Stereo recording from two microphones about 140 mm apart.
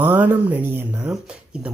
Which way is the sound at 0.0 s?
15° right (ahead or behind).